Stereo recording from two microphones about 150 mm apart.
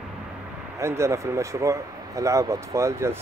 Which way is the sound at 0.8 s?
20° right (ahead or behind).